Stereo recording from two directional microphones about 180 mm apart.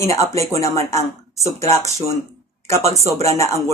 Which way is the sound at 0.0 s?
15° left (ahead or behind).